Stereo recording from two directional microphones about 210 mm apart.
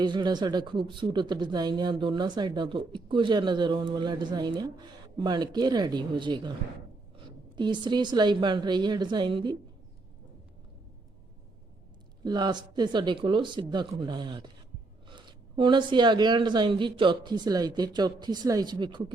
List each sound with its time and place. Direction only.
0.0 s speech: 20° right (ahead or behind)
7.5 s speech: 20° right (ahead or behind)
12.2 s speech: 20° right (ahead or behind)